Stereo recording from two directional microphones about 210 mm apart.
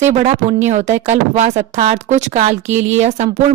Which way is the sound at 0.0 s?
35° right (ahead or behind).